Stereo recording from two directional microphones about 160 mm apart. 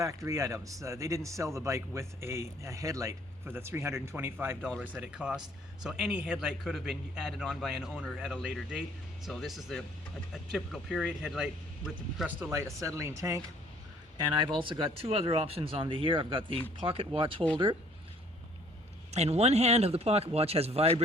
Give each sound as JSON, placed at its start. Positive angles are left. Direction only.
{"t": 0.0, "sound": "a man's voice", "side_deg": -20}
{"t": 14.2, "sound": "a man's voice", "side_deg": -30}
{"t": 19.1, "sound": "a man's voice", "side_deg": -40}